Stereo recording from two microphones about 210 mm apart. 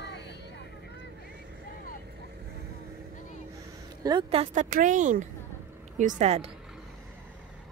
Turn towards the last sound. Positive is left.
turn(degrees=-30)  # may be behind; listen again after turning